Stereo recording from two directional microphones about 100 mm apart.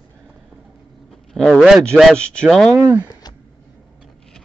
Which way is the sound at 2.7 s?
25° right (ahead or behind).